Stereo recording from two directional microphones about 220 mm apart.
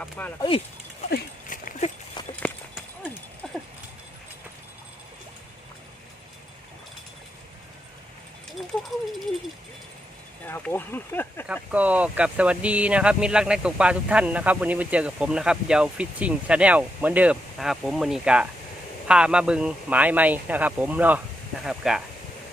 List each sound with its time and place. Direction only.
0.0 s speech: 5° left (ahead or behind)
0.3 s speech: 25° left (ahead or behind)
1.1 s a sound: 35° left (ahead or behind)
2.3 s clip-clop: 5° left (ahead or behind)
3.4 s horse: centre (ahead or behind)
10.4 s speech: 10° left (ahead or behind)
11.4 s a man's voice: 5° right (ahead or behind)